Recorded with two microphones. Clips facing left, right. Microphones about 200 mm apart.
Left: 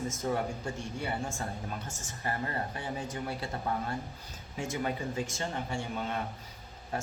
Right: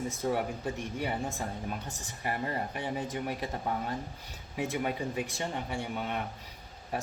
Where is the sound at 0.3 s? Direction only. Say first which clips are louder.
Right 2 dB; 15° right (ahead or behind).